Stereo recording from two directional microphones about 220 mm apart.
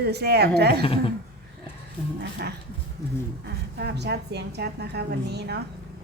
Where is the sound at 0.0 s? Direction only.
45° right (ahead or behind).